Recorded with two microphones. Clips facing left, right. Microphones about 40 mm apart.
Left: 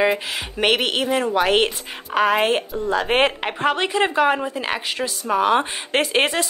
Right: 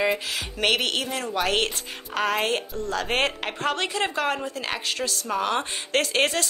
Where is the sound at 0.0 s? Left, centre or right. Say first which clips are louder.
Left 5 dB; left.